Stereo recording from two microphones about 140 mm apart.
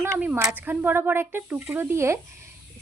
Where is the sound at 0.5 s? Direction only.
10° right (ahead or behind).